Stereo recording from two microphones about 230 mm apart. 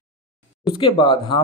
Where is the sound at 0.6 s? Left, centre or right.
Left.